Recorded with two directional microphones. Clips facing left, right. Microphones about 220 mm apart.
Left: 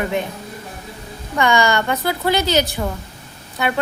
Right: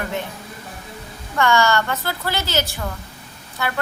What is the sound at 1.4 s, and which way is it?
A woman's voice, 15° left (ahead or behind).